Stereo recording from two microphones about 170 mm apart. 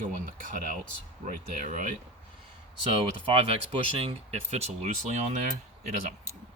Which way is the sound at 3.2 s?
35° right (ahead or behind).